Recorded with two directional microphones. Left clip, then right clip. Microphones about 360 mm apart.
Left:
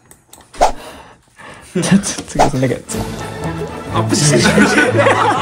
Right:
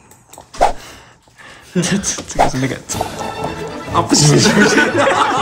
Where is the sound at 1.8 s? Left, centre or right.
Centre.